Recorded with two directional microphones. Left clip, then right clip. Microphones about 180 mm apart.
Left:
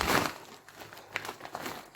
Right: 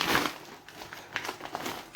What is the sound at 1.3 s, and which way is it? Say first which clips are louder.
Crumpling: right 4 dB; centre (ahead or behind).